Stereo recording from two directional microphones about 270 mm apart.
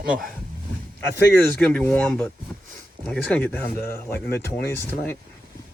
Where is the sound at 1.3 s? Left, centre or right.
Centre.